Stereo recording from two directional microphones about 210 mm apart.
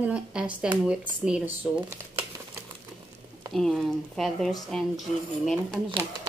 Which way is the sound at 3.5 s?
Centre (ahead or behind).